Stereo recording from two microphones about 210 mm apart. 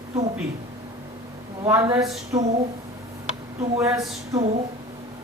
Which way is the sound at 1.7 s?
15° right (ahead or behind).